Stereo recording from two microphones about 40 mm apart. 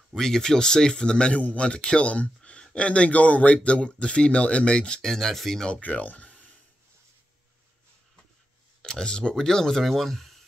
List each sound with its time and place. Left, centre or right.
0.1 s speech: centre
5.0 s speech: centre
5.8 s a sound: left
8.8 s speech: centre